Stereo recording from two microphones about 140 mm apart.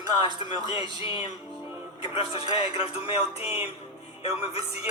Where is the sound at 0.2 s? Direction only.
35° left (ahead or behind).